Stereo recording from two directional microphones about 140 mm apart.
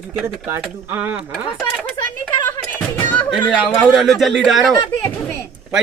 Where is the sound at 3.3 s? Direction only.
35° left (ahead or behind).